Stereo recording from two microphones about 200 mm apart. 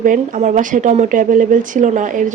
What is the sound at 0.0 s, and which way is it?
A woman's voice, 40° right (ahead or behind).